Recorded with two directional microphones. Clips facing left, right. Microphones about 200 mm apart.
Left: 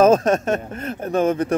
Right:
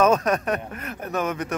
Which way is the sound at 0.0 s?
30° left (ahead or behind).